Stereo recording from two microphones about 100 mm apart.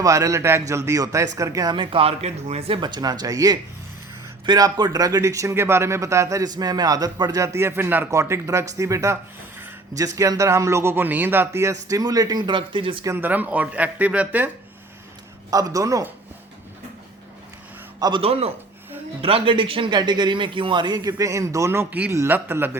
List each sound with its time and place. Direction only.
0.0 s speech: 35° right (ahead or behind)
1.7 s speech: 55° right (ahead or behind); by 2.7 s 90° right
2.8 s a man's voice: 45° right (ahead or behind)
7.3 s speech: 30° right (ahead or behind)
8.1 s speech: 30° right (ahead or behind); by 13.1 s 60° right (ahead or behind)
13.1 s speech: 20° right (ahead or behind)
15.4 s speech: 35° right (ahead or behind)
18.2 s a man's voice: 85° right
19.2 s a man's voice: 65° right (ahead or behind); by 21.1 s 50° right (ahead or behind)
21.1 s speech: 30° right (ahead or behind)
21.8 s speech: 15° right (ahead or behind)